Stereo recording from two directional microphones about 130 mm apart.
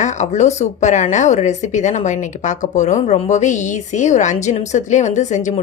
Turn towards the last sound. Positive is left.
turn(degrees=65)  # may be behind; listen again after turning